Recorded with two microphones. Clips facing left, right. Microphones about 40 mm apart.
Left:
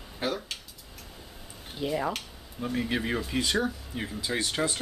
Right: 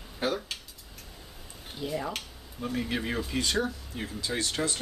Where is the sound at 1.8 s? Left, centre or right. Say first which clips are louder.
Left 4 dB; centre.